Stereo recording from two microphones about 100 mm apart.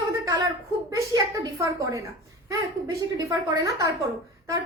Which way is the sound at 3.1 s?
35° right (ahead or behind).